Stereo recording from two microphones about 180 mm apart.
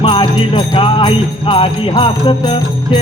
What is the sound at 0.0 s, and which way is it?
Jingle bell, 25° left (ahead or behind).